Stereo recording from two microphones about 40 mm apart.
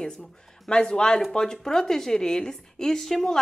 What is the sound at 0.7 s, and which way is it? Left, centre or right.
Speech, left.